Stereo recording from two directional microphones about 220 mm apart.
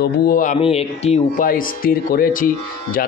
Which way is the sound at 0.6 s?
25° left (ahead or behind).